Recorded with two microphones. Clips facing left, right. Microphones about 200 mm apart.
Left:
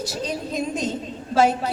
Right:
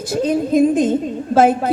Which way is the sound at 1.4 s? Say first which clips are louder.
Right 5 dB; 50° right (ahead or behind).